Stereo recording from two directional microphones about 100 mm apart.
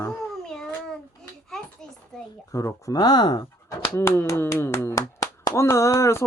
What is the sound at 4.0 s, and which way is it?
Speech, 25° left (ahead or behind).